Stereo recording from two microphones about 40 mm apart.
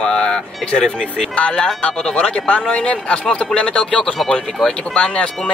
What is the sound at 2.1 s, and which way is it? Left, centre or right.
Speech, left.